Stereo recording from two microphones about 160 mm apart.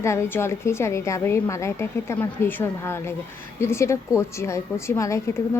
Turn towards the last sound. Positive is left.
turn(degrees=20)  # may be behind; listen again after turning